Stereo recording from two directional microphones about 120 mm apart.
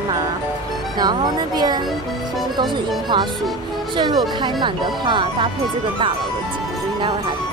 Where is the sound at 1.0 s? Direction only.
35° right (ahead or behind).